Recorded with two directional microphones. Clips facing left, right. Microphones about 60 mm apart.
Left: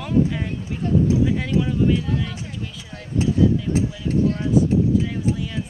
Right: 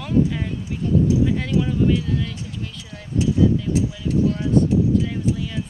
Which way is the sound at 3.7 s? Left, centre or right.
Left.